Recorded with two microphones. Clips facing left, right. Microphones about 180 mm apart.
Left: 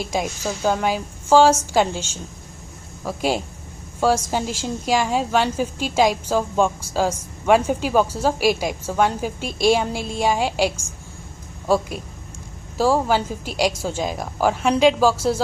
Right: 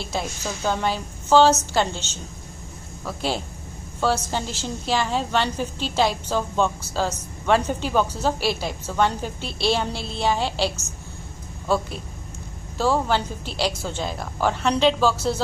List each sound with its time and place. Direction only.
0.0 s a woman's voice: 10° left (ahead or behind)